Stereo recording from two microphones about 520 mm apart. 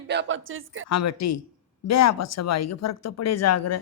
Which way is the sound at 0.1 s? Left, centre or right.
Right.